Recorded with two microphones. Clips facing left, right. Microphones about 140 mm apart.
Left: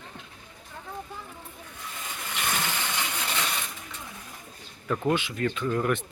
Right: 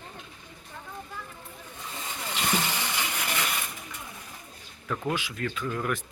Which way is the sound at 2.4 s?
15° right (ahead or behind).